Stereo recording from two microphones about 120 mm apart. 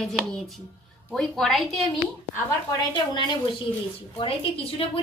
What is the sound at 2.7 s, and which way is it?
A woman's voice, 40° left (ahead or behind).